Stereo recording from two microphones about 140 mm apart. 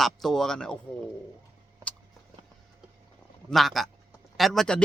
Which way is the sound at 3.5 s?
Centre (ahead or behind).